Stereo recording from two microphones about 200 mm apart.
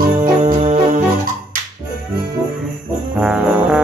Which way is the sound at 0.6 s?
35° right (ahead or behind).